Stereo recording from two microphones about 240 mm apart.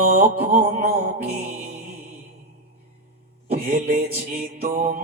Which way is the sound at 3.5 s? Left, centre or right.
Right.